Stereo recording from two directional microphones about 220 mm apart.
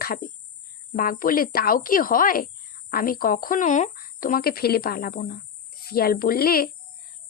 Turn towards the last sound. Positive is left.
turn(degrees=45)  # may be behind; listen again after turning